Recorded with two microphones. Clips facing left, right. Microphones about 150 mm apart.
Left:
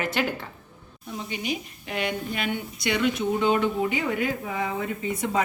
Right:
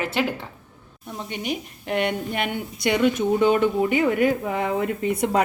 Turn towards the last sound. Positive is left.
turn(degrees=-60)  # may be behind; listen again after turning